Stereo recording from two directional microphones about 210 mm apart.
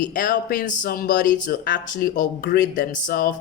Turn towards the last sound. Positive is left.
turn(degrees=45)  # may be behind; listen again after turning